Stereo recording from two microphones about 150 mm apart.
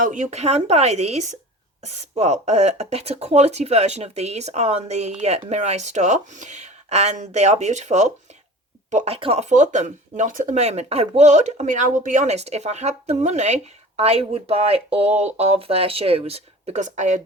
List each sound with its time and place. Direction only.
0.0 s speech: 55° right (ahead or behind)